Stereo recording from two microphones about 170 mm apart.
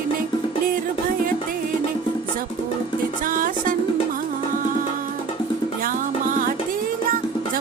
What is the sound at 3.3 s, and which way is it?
Music, 55° right (ahead or behind).